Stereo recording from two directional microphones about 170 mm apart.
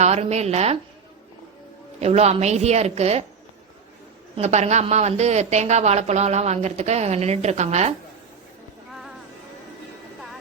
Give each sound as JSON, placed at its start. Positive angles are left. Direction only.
{"t": 0.0, "sound": "a woman's voice", "side_deg": -40}
{"t": 2.0, "sound": "a woman's voice", "side_deg": -40}
{"t": 4.4, "sound": "a woman's voice", "side_deg": -40}